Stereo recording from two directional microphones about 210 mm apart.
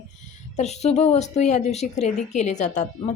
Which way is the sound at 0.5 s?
30° left (ahead or behind).